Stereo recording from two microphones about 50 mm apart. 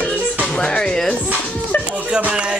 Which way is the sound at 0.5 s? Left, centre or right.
Centre.